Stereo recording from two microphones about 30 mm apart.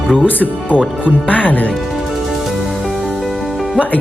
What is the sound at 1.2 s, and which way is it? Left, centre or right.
Speech, left.